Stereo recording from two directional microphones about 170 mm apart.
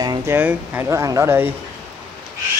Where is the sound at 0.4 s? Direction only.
10° right (ahead or behind).